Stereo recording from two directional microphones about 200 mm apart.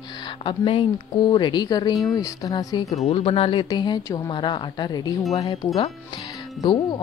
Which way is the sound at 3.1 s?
30° left (ahead or behind).